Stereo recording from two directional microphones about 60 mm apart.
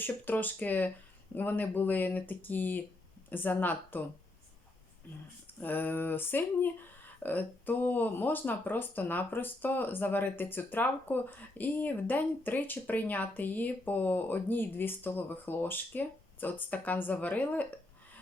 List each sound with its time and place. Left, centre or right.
0.0 s speech: left
5.5 s speech: left